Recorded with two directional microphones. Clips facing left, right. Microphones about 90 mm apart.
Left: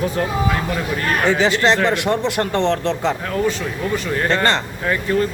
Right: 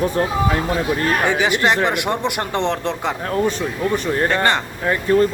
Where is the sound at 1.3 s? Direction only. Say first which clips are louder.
Left 5 dB; 15° right (ahead or behind).